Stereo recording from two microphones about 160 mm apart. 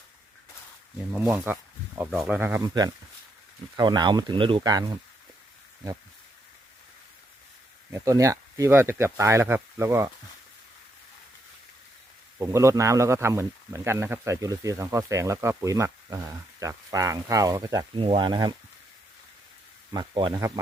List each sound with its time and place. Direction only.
1.1 s speech: 15° right (ahead or behind)
2.0 s speech: 5° right (ahead or behind)
3.8 s speech: 25° right (ahead or behind)
7.9 s speech: 20° right (ahead or behind)
12.4 s speech: 15° right (ahead or behind)
19.9 s speech: 30° right (ahead or behind)